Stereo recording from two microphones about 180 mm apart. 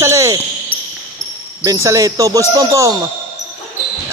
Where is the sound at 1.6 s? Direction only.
15° right (ahead or behind).